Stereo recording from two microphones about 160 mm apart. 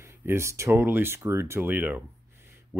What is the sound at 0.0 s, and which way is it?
Speech, 15° right (ahead or behind).